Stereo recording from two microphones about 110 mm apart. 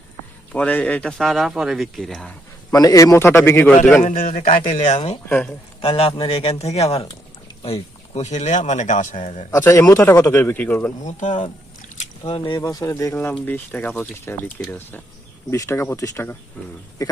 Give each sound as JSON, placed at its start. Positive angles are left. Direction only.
{"t": 0.5, "sound": "a man's voice", "side_deg": 15}
{"t": 1.2, "sound": "a man's voice", "side_deg": 0}
{"t": 2.7, "sound": "a man's voice", "side_deg": 35}
{"t": 4.4, "sound": "speech", "side_deg": 85}
{"t": 5.8, "sound": "a man's voice", "side_deg": 55}
{"t": 7.6, "sound": "speech", "side_deg": 75}
{"t": 9.6, "sound": "a man's voice", "side_deg": 25}
{"t": 11.0, "sound": "speech", "side_deg": 90}
{"t": 12.2, "sound": "speech", "side_deg": 50}
{"t": 12.5, "sound": "a man's voice", "side_deg": 30}
{"t": 13.4, "sound": "a man's voice", "side_deg": 15}